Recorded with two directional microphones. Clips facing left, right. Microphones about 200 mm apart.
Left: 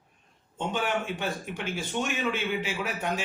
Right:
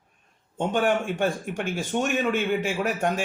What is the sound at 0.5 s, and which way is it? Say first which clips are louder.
Speech: right 6 dB; 45° right (ahead or behind).